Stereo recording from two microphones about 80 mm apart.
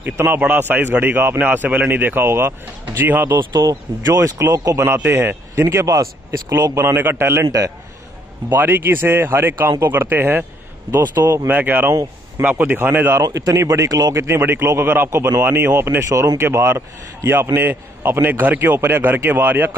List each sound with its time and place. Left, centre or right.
0.0 s speech: right
3.6 s speech: right
4.8 s a man's voice: right
8.5 s speech: right
13.2 s speech: right
14.2 s a man's voice: right